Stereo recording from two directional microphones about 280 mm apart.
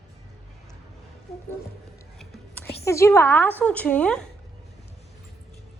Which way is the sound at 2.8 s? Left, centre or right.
Centre.